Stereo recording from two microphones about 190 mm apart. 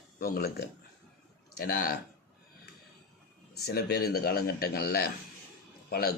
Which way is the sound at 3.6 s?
55° left (ahead or behind).